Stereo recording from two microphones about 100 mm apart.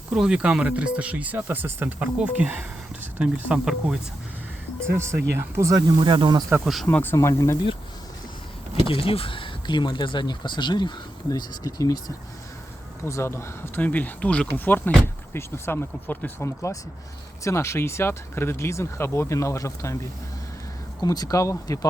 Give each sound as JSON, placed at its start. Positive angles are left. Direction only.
{"t": 0.1, "sound": "speech", "side_deg": -10}
{"t": 4.9, "sound": "speech", "side_deg": -25}
{"t": 6.0, "sound": "speech", "side_deg": -55}
{"t": 6.9, "sound": "speech", "side_deg": 20}
{"t": 8.9, "sound": "speech", "side_deg": 65}
{"t": 11.3, "sound": "speech", "side_deg": 40}
{"t": 13.1, "sound": "speech", "side_deg": 25}
{"t": 21.0, "sound": "speech", "side_deg": 40}